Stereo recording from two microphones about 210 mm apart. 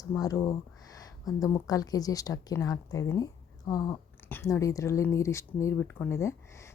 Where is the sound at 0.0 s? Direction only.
15° left (ahead or behind).